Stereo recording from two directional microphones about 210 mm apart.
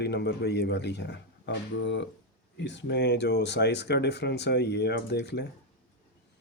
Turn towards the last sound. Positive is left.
turn(degrees=50)  # may be behind; listen again after turning